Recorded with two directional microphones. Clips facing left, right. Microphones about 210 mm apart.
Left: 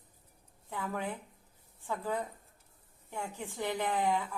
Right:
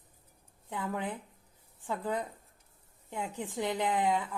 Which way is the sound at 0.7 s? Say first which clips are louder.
Right 1 dB; 15° right (ahead or behind).